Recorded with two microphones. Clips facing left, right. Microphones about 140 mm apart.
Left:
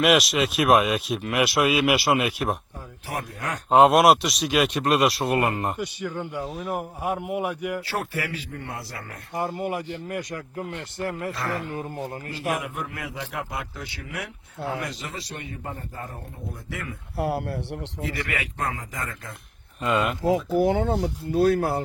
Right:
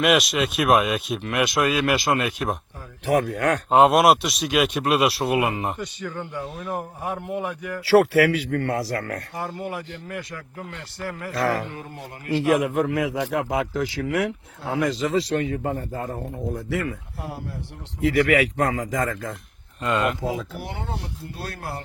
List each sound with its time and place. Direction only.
0.0 s speech: centre (ahead or behind)
3.3 s speech: 75° right (ahead or behind)
3.7 s speech: centre (ahead or behind)
5.7 s speech: 10° left (ahead or behind)
6.4 s speech: centre (ahead or behind)
7.9 s speech: 90° right
9.3 s speech: 15° left (ahead or behind)
11.3 s a man's voice: 90° right
17.2 s speech: 70° left (ahead or behind)
18.0 s a man's voice: 90° right
19.8 s speech: 5° left (ahead or behind)
20.2 s speech: 90° left